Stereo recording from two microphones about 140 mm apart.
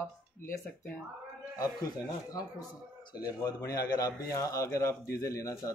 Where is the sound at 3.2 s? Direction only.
25° left (ahead or behind).